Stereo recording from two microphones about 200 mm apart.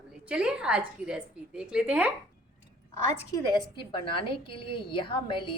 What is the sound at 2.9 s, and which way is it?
A woman's voice, 15° left (ahead or behind).